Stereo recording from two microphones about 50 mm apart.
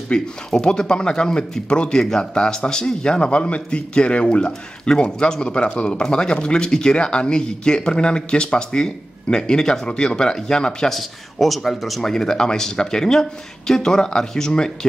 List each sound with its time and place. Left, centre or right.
0.1 s speech: centre
11.0 s speech: centre